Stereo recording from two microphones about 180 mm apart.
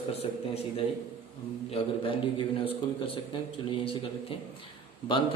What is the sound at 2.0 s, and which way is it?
Speech, 30° left (ahead or behind).